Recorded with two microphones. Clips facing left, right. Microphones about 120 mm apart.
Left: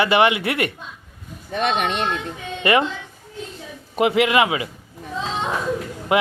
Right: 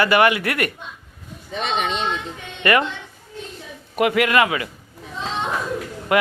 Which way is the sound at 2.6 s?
25° left (ahead or behind).